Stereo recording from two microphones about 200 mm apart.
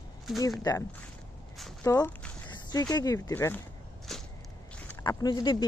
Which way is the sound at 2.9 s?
15° left (ahead or behind).